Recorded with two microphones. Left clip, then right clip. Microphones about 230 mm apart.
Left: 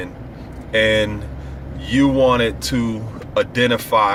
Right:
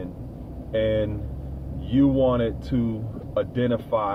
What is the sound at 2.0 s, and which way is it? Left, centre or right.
Speech, left.